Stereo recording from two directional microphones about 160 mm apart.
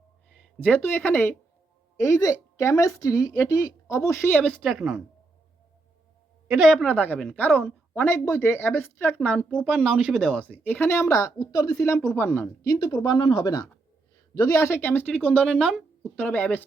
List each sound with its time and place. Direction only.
0.6 s a woman's voice: 10° left (ahead or behind)
6.5 s a woman's voice: centre (ahead or behind)
6.8 s speech: 10° left (ahead or behind)
13.0 s a woman's voice: 25° left (ahead or behind); by 16.6 s 10° left (ahead or behind)